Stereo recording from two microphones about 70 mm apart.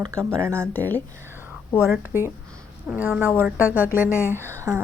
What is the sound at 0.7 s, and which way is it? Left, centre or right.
Speech, left.